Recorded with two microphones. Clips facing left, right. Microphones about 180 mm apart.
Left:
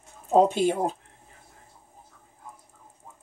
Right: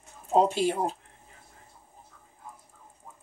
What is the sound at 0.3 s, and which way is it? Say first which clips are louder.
Speech: left 3 dB; 50° left (ahead or behind).